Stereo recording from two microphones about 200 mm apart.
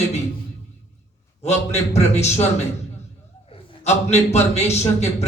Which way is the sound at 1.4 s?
35° left (ahead or behind).